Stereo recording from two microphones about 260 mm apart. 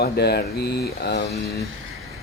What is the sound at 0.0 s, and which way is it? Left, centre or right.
Speech, left.